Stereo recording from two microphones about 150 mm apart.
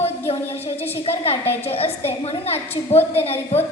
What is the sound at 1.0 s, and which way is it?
Speech, 40° left (ahead or behind).